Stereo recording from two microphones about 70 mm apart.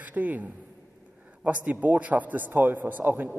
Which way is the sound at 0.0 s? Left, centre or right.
Right.